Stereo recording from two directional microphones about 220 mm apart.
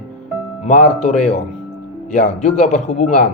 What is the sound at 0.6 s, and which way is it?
Speech, 30° left (ahead or behind).